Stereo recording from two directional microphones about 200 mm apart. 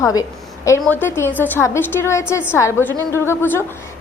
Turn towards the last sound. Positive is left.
turn(degrees=10)  # may be behind; listen again after turning